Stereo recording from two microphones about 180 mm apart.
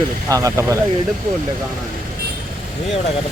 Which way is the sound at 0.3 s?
20° right (ahead or behind).